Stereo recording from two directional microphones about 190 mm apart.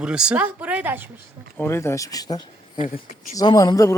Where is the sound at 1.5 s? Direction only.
10° left (ahead or behind).